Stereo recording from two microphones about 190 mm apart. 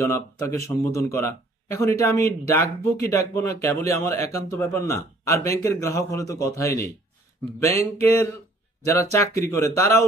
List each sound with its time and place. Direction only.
0.0 s speech: 15° left (ahead or behind)